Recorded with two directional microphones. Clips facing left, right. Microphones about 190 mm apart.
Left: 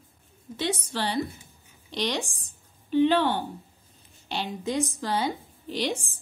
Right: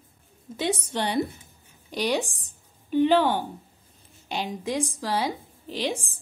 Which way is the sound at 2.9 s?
10° right (ahead or behind).